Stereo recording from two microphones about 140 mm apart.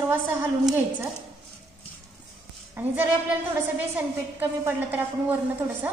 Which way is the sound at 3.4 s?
15° right (ahead or behind).